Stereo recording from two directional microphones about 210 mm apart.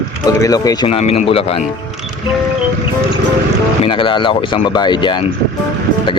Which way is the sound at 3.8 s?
25° left (ahead or behind).